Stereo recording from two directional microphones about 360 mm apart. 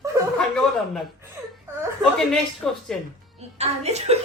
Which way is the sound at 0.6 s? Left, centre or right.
Centre.